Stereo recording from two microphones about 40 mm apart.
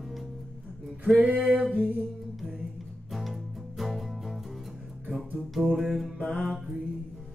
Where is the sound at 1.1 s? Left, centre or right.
Right.